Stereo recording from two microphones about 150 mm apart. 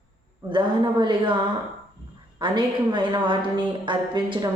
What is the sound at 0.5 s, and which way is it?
Speech, 30° right (ahead or behind).